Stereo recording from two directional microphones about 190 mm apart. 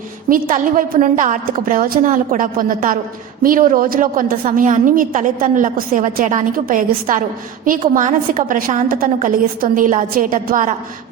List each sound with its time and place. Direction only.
0.3 s a woman's voice: 45° right (ahead or behind)